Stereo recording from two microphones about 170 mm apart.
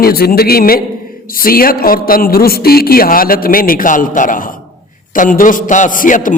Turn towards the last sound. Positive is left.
turn(degrees=50)  # may be behind; listen again after turning